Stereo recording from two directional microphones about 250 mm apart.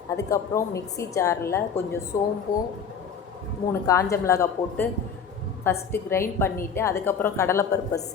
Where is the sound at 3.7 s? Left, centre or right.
Centre.